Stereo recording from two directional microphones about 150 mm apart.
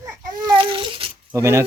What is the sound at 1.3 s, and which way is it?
Speech, 15° right (ahead or behind).